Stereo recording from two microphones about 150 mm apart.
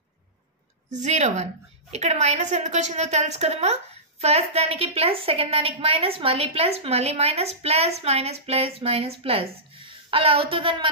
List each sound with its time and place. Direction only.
0.9 s a woman's voice: 50° right (ahead or behind)